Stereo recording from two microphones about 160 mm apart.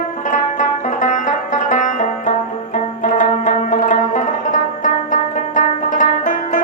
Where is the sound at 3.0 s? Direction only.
55° left (ahead or behind).